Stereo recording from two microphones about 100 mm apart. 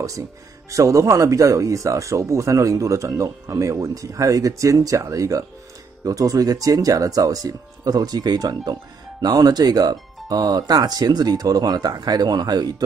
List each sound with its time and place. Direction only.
0.7 s speech: 30° right (ahead or behind)